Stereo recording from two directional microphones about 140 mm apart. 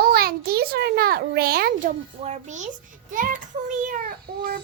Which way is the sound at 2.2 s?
55° right (ahead or behind).